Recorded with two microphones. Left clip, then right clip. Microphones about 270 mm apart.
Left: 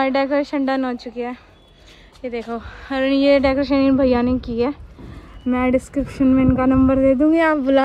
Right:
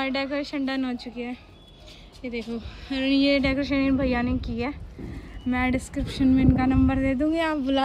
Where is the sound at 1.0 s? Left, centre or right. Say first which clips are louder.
Left 7 dB; centre.